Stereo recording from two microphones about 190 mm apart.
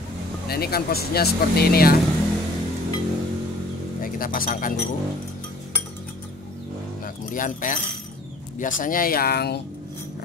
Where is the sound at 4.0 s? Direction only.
50° left (ahead or behind).